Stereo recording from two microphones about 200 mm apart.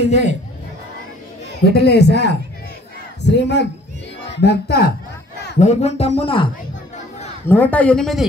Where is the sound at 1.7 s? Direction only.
55° left (ahead or behind).